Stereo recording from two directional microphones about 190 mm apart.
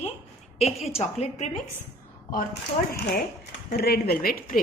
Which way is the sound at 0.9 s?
35° left (ahead or behind).